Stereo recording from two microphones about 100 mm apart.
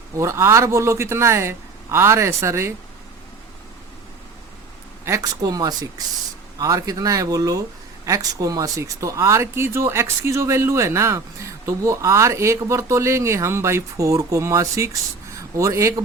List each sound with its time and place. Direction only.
0.2 s speech: 30° right (ahead or behind)
5.2 s speech: 40° right (ahead or behind)